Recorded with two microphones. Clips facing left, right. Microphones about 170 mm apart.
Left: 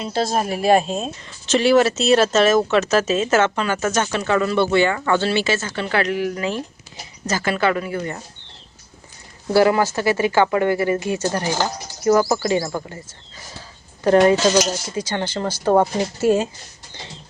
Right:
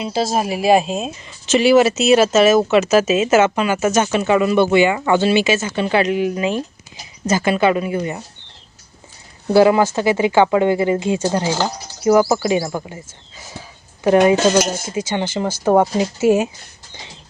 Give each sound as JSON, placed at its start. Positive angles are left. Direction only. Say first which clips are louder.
{"t": 0.0, "sound": "speech", "louder": "right 2 dB", "side_deg": -10}
{"t": 9.5, "sound": "speech", "louder": "right 3 dB", "side_deg": -20}
{"t": 13.5, "sound": "a sound", "louder": "right 6 dB", "side_deg": -15}
{"t": 14.5, "sound": "speech", "louder": "right 2 dB", "side_deg": -55}
{"t": 14.9, "sound": "speech", "louder": "right 5 dB", "side_deg": -10}